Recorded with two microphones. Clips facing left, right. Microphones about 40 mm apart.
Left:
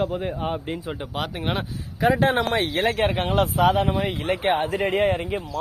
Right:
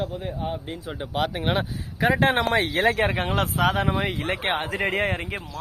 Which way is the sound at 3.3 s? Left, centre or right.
Right.